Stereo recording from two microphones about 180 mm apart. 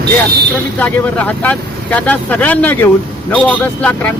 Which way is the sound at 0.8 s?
10° left (ahead or behind).